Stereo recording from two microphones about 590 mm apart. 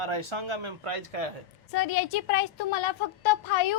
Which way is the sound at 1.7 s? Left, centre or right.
Left.